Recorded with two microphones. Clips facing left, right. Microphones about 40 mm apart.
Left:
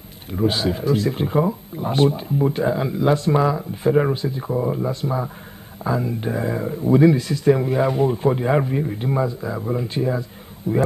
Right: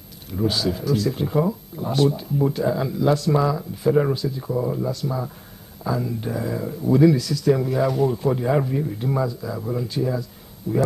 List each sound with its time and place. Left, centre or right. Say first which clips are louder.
0.3 s speech: left 2 dB; left